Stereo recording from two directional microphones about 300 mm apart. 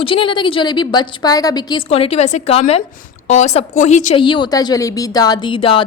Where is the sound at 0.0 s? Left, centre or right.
Centre.